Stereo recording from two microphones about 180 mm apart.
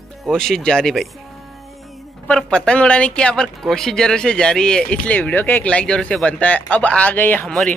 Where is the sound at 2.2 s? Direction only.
5° left (ahead or behind).